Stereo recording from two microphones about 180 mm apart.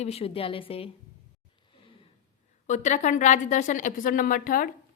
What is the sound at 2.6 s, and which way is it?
A woman's voice, 40° left (ahead or behind).